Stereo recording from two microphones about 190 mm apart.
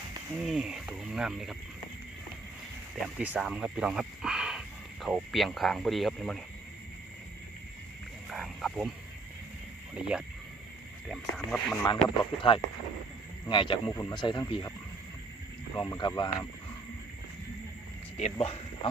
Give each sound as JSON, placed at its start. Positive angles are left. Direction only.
{"t": 0.4, "sound": "speech", "side_deg": -5}
{"t": 3.2, "sound": "speech", "side_deg": -5}
{"t": 8.3, "sound": "frog", "side_deg": 0}
{"t": 9.9, "sound": "speech", "side_deg": -5}
{"t": 12.2, "sound": "speech", "side_deg": 25}
{"t": 15.7, "sound": "speech", "side_deg": 20}
{"t": 18.2, "sound": "speech", "side_deg": 30}